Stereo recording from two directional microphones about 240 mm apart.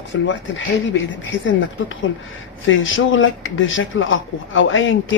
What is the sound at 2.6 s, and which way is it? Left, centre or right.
Speech, left.